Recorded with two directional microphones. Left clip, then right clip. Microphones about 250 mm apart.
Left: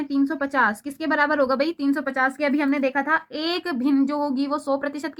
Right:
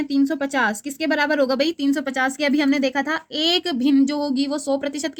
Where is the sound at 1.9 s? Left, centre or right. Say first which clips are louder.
Right 1 dB; right.